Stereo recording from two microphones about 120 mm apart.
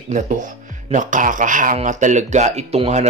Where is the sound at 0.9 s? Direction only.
90° right.